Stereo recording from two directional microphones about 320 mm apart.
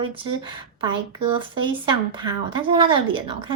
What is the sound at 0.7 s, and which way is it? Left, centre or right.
A woman's voice, centre.